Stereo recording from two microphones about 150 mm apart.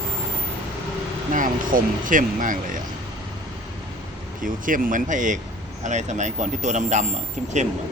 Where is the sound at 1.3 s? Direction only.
65° right (ahead or behind).